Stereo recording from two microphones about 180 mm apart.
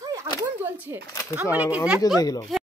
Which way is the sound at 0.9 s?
15° right (ahead or behind).